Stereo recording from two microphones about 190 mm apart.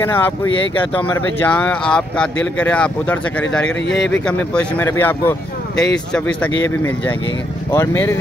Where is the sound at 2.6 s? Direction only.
5° left (ahead or behind).